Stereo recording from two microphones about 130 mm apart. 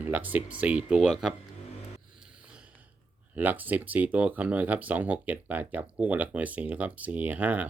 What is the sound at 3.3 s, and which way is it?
Speech, 15° right (ahead or behind).